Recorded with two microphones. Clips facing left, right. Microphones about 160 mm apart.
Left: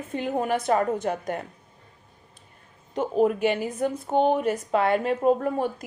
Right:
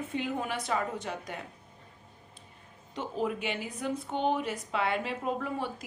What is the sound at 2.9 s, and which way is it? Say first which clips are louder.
A woman's voice: left 10 dB; 50° left (ahead or behind).